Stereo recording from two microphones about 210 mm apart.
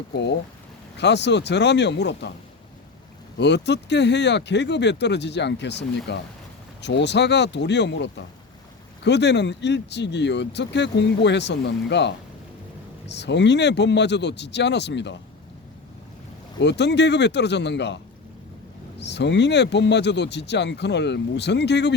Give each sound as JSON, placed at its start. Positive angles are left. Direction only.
{"t": 0.1, "sound": "speech", "side_deg": 55}
{"t": 3.3, "sound": "speech", "side_deg": 55}
{"t": 16.6, "sound": "speech", "side_deg": 55}